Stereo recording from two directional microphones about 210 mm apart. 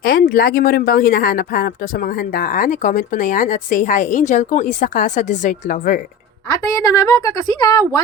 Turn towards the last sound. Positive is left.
turn(degrees=15)  # may be behind; listen again after turning